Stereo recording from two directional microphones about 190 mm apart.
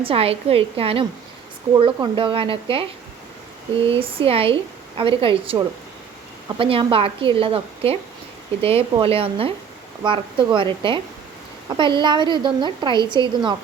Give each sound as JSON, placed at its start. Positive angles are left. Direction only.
{"t": 0.0, "sound": "a woman's voice", "side_deg": -30}
{"t": 3.8, "sound": "a woman's voice", "side_deg": -30}